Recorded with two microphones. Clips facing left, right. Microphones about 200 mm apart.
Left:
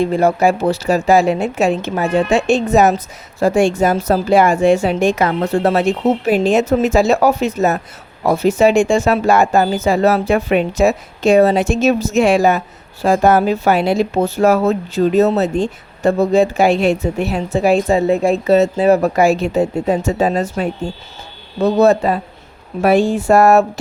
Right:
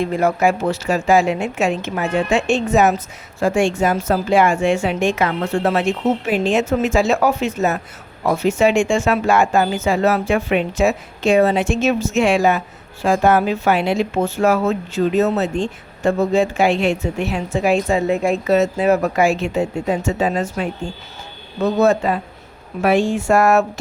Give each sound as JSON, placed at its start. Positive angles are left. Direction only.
{"t": 0.0, "sound": "speech", "side_deg": 30}